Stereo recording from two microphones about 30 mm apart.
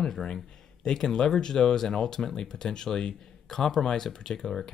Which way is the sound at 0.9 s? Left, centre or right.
Left.